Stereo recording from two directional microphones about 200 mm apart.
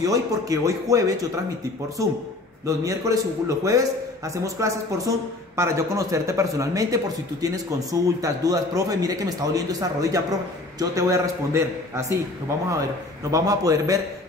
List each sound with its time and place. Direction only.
0.0 s speech: 15° right (ahead or behind)
2.6 s speech: 15° right (ahead or behind)
13.3 s speech: 15° right (ahead or behind)